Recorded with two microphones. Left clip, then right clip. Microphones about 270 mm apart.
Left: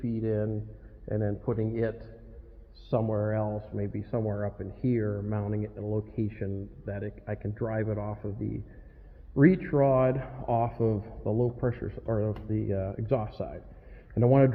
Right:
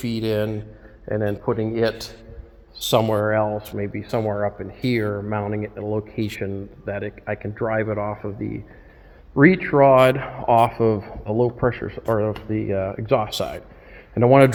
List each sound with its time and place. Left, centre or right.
0.0 s speech: centre
9.6 s speech: right